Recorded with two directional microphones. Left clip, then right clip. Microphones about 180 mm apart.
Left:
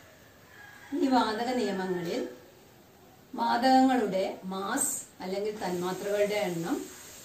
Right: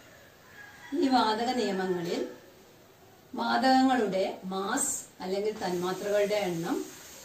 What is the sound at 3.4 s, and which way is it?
Speech, 5° left (ahead or behind).